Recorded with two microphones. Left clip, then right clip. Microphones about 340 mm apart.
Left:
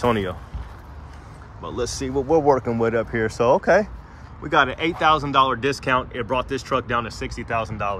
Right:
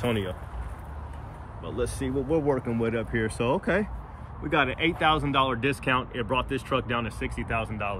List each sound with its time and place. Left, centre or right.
0.0 s speech: centre
1.6 s speech: centre